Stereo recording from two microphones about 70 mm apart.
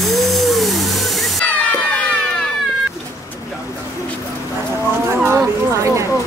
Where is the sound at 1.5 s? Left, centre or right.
Centre.